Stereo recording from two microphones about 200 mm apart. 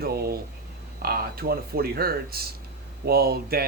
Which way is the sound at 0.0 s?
50° right (ahead or behind).